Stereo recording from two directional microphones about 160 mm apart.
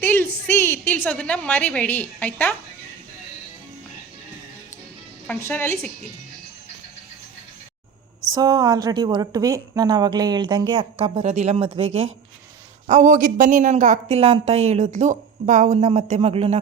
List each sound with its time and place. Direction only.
0.0 s a woman's voice: 15° left (ahead or behind)
5.3 s a woman's voice: 15° left (ahead or behind)
8.3 s a woman's voice: 25° right (ahead or behind); by 12.1 s 40° right (ahead or behind)
12.9 s speech: 50° right (ahead or behind)